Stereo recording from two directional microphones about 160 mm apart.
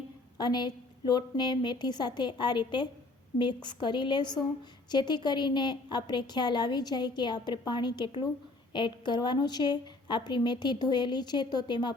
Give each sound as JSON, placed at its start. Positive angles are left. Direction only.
{"t": 0.3, "sound": "a woman's voice", "side_deg": 25}